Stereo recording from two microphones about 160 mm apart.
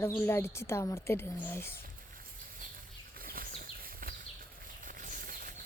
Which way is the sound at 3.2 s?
65° right (ahead or behind).